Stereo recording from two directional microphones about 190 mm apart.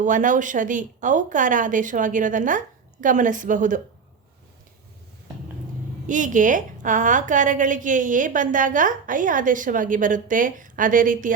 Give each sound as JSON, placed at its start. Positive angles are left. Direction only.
{"t": 0.0, "sound": "a woman's voice", "side_deg": -40}
{"t": 6.1, "sound": "a woman's voice", "side_deg": -40}